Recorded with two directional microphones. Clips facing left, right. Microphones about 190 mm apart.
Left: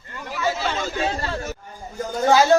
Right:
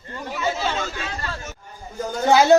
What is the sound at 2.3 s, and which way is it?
Speech, 20° right (ahead or behind).